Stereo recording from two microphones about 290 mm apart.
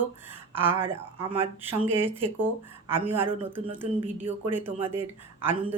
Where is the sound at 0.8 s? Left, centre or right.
Centre.